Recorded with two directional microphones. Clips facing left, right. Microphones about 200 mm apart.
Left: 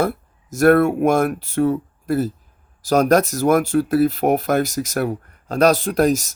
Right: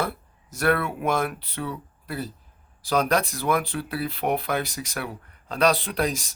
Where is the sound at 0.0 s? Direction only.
45° left (ahead or behind).